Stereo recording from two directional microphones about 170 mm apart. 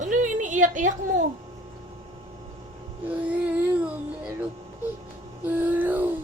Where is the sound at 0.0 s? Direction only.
45° right (ahead or behind).